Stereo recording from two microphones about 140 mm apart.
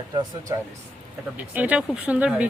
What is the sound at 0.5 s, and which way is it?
Speech, 25° right (ahead or behind).